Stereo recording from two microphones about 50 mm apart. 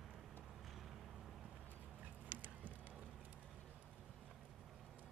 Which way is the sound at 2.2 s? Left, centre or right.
Right.